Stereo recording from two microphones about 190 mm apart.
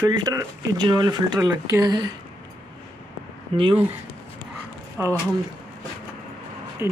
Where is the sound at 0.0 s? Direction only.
20° right (ahead or behind).